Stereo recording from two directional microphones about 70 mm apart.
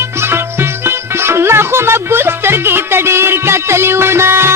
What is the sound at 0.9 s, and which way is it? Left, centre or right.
Music, right.